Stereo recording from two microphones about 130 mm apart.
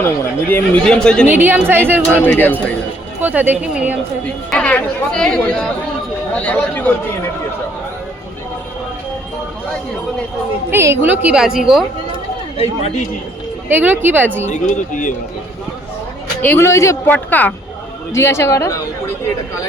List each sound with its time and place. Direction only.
0.0 s speech: 15° left (ahead or behind)
1.3 s a woman's voice: 15° right (ahead or behind)
2.1 s speech: 15° left (ahead or behind)
3.2 s a woman's voice: 15° right (ahead or behind)
4.5 s speech: 10° left (ahead or behind)
10.7 s a woman's voice: 20° right (ahead or behind)
12.5 s speech: 50° left (ahead or behind)
13.7 s a woman's voice: 15° right (ahead or behind)
14.5 s speech: 80° left
16.4 s a woman's voice: 15° left (ahead or behind)